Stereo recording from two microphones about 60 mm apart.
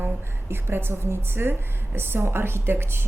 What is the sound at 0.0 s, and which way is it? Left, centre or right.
A woman's voice, right.